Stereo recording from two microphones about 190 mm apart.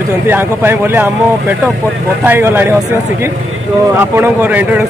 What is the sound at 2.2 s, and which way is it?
Speech, 10° right (ahead or behind).